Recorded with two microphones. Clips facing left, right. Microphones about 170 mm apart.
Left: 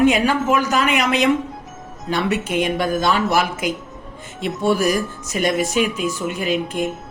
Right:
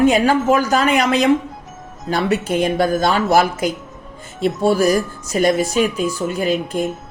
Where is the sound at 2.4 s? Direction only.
35° right (ahead or behind).